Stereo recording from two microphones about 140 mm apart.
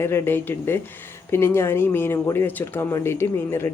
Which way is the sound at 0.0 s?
15° left (ahead or behind).